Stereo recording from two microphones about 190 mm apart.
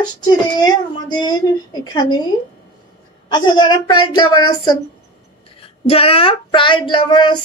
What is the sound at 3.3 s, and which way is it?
Speech, 25° left (ahead or behind).